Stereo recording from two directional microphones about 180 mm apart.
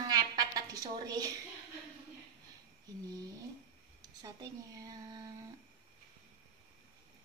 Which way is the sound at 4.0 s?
20° right (ahead or behind).